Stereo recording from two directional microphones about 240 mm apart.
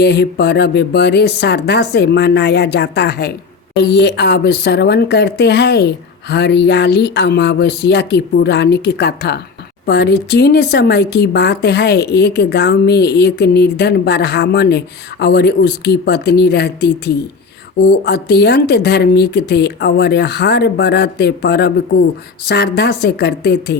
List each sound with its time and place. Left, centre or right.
0.0 s speech: left